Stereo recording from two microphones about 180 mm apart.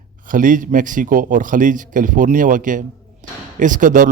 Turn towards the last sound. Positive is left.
turn(degrees=-45)  # may be behind; listen again after turning